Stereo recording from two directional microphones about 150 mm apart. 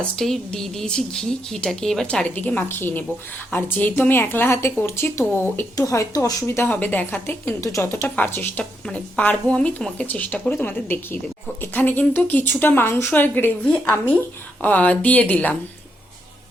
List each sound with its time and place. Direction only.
0.2 s a woman's voice: 5° left (ahead or behind)